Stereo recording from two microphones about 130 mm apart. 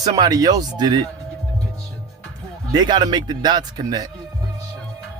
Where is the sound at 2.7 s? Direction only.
35° right (ahead or behind).